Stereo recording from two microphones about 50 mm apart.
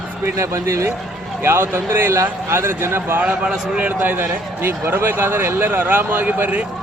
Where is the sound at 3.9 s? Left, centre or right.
Right.